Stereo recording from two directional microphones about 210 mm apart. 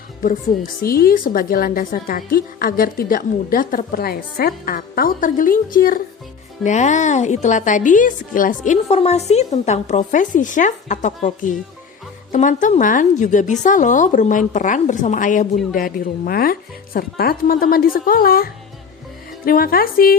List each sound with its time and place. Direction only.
0.2 s a woman's voice: 40° left (ahead or behind)